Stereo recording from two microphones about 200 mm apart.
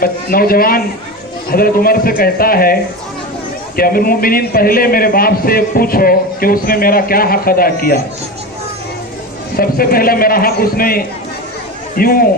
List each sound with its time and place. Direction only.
0.0 s a man's voice: 45° left (ahead or behind)
3.8 s a man's voice: 45° left (ahead or behind)
9.6 s a man's voice: 45° left (ahead or behind)